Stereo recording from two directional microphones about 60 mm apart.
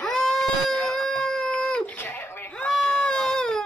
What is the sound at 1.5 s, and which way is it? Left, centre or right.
Dog, centre.